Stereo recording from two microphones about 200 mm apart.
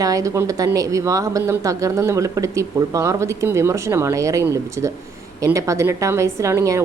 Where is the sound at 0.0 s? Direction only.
15° right (ahead or behind).